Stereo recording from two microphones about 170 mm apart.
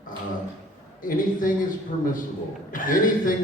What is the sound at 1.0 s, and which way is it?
A man's voice, 55° left (ahead or behind).